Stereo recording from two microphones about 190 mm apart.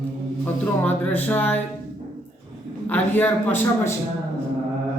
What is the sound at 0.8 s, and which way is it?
Speech, 10° left (ahead or behind).